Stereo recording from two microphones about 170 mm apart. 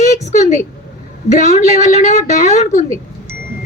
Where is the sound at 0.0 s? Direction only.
45° left (ahead or behind).